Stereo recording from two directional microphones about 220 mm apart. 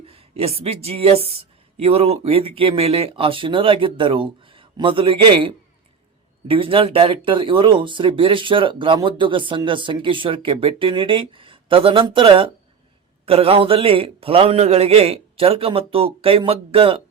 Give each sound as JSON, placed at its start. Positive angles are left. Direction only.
{"t": 0.0, "sound": "speech", "side_deg": -25}